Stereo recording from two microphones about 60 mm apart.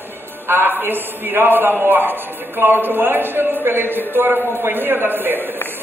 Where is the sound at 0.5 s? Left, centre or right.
Right.